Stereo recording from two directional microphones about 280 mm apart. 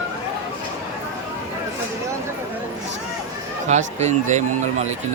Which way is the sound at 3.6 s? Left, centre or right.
Right.